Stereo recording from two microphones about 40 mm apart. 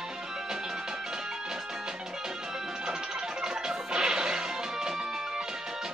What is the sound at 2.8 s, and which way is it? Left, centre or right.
Music, centre.